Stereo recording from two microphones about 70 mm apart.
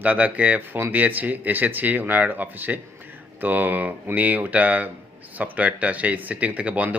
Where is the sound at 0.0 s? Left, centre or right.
Right.